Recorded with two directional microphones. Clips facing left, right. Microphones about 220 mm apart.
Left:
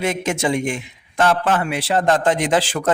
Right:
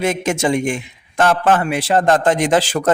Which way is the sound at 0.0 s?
45° right (ahead or behind).